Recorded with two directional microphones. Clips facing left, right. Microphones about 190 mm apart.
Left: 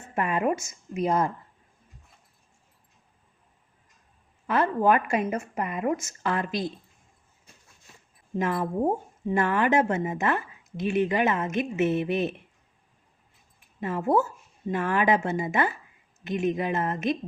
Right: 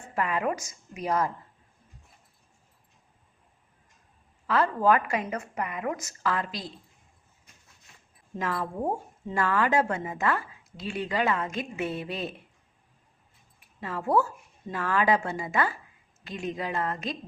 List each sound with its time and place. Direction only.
0.1 s a woman's voice: 25° left (ahead or behind)
4.4 s a woman's voice: 20° left (ahead or behind)
8.4 s a woman's voice: 20° left (ahead or behind)
13.8 s a woman's voice: 20° left (ahead or behind)